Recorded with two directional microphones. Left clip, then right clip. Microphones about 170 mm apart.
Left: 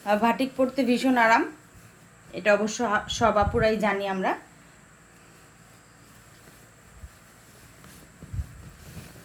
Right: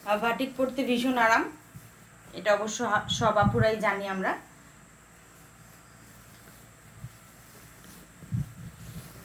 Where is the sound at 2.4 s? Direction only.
50° left (ahead or behind).